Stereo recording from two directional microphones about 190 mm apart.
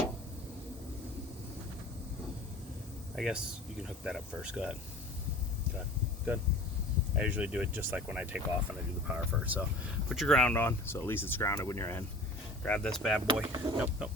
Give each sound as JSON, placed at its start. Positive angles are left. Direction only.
{"t": 3.2, "sound": "speech", "side_deg": -5}
{"t": 7.2, "sound": "speech", "side_deg": -5}
{"t": 10.1, "sound": "speech", "side_deg": 0}
{"t": 13.4, "sound": "speech", "side_deg": -20}
{"t": 13.7, "sound": "speech", "side_deg": -5}